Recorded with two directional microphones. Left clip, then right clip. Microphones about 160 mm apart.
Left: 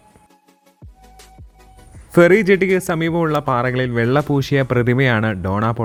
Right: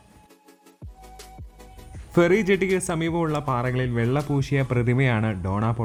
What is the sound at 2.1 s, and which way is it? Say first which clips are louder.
A man's voice: left 8 dB; 20° left (ahead or behind).